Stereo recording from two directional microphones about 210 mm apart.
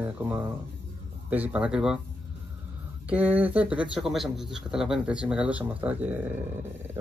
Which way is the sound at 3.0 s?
10° right (ahead or behind).